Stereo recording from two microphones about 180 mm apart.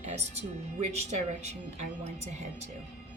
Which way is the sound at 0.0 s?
40° right (ahead or behind).